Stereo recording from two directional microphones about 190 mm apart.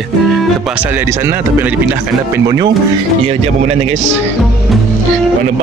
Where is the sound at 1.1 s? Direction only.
10° right (ahead or behind).